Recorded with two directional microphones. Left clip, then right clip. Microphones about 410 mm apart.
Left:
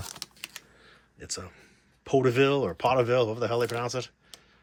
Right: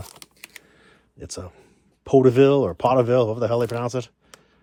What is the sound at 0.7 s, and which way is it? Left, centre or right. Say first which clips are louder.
A man's voice: right 5 dB; centre.